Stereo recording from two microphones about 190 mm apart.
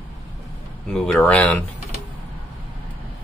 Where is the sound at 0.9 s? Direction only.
Centre (ahead or behind).